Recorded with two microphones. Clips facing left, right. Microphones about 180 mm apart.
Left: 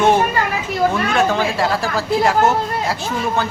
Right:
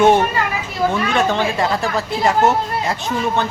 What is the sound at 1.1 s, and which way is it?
Speech, centre (ahead or behind).